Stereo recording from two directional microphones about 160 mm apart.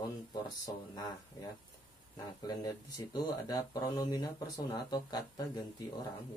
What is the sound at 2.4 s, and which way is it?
Speech, 25° left (ahead or behind).